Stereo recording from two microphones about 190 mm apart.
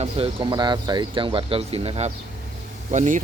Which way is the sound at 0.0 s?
30° right (ahead or behind).